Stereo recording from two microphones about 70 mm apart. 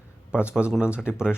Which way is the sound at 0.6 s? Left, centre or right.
Centre.